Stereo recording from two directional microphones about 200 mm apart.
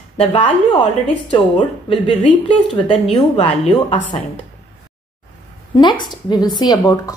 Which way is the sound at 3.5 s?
35° left (ahead or behind).